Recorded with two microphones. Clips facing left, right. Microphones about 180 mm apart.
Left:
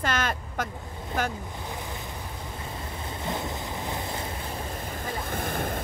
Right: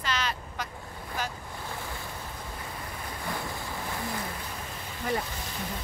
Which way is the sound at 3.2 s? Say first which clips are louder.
Left 4 dB; 20° left (ahead or behind).